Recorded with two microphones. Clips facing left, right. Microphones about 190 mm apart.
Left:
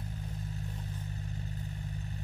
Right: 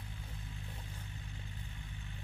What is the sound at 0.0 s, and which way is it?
Vehicle, 40° left (ahead or behind).